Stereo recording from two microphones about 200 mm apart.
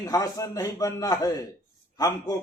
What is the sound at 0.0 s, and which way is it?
A man's voice, 15° left (ahead or behind).